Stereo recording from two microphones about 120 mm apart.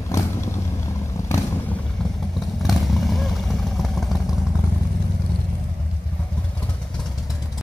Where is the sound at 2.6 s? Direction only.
Centre (ahead or behind).